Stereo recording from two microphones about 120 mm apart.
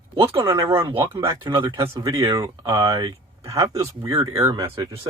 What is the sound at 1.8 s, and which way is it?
Speech, 25° right (ahead or behind).